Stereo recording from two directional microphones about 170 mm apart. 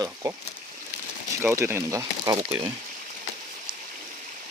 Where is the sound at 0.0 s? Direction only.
15° right (ahead or behind).